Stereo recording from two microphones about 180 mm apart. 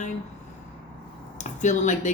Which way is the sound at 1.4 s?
40° left (ahead or behind).